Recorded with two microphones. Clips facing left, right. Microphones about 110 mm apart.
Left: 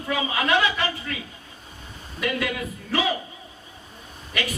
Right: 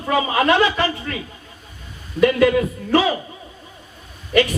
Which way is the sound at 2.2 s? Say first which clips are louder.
Right 12 dB; 45° right (ahead or behind).